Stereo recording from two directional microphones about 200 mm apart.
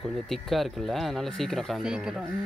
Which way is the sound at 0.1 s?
Centre (ahead or behind).